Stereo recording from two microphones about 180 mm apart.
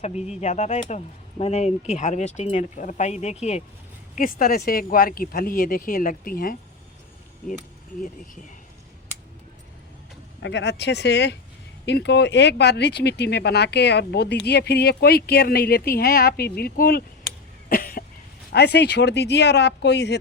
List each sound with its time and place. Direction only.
0.0 s speech: 35° left (ahead or behind)
4.1 s speech: 50° left (ahead or behind)
10.4 s speech: 75° left (ahead or behind); by 17.0 s 55° left (ahead or behind)
17.7 s cough: 50° left (ahead or behind)
18.5 s speech: 65° left (ahead or behind)